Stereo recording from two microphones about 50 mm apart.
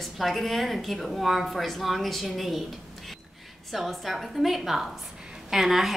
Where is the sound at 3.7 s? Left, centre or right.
Centre.